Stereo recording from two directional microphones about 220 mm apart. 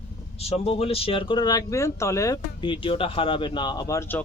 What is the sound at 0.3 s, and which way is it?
Speech, 30° left (ahead or behind).